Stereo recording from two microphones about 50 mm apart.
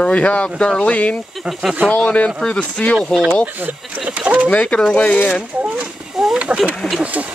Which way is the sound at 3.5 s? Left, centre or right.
Right.